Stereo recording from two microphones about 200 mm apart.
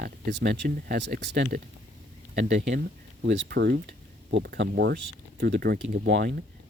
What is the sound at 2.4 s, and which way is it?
Speech, 50° right (ahead or behind).